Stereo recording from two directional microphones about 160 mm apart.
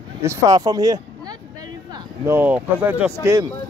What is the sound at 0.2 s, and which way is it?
Speech, 25° right (ahead or behind).